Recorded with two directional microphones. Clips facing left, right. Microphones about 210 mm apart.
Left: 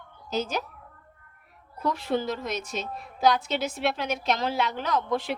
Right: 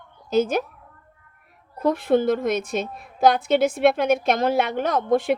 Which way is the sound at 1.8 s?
55° right (ahead or behind).